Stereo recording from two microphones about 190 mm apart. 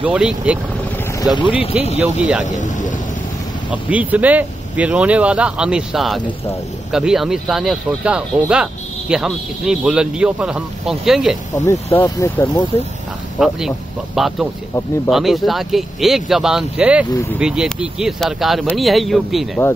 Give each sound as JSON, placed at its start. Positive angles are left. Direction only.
{"t": 0.0, "sound": "speech", "side_deg": -5}
{"t": 1.3, "sound": "speech", "side_deg": 25}
{"t": 2.0, "sound": "speech", "side_deg": -10}
{"t": 2.4, "sound": "speech", "side_deg": 40}
{"t": 3.7, "sound": "speech", "side_deg": -10}
{"t": 11.5, "sound": "speech", "side_deg": 15}
{"t": 13.4, "sound": "speech", "side_deg": 0}